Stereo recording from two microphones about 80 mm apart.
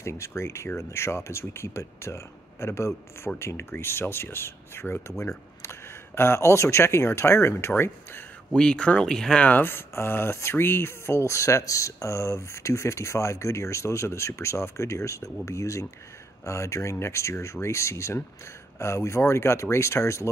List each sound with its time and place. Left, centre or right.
0.0 s speech: left
8.5 s speech: centre
9.5 s speech: left